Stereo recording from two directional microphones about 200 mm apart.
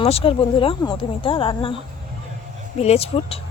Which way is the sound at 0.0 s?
30° left (ahead or behind).